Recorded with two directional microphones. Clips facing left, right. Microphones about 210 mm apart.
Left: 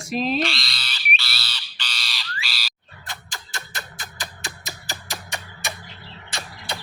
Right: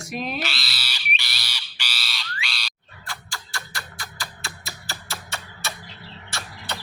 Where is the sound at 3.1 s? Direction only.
20° left (ahead or behind).